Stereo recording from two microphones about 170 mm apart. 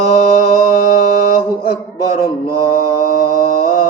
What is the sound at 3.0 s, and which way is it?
Mantra, 60° left (ahead or behind).